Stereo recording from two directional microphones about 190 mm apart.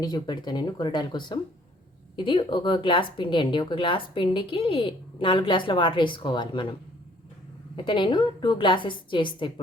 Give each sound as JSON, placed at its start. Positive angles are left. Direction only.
{"t": 0.0, "sound": "speech", "side_deg": 20}
{"t": 7.8, "sound": "speech", "side_deg": 25}